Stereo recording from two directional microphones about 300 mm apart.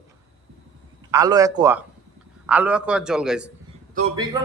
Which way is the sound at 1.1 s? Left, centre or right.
Centre.